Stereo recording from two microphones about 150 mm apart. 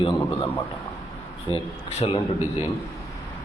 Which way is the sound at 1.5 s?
40° left (ahead or behind).